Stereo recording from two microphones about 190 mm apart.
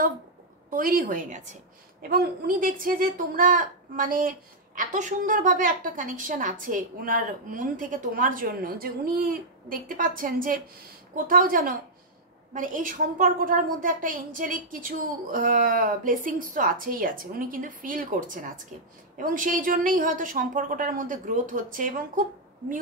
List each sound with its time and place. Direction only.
0.7 s a woman's voice: 50° right (ahead or behind)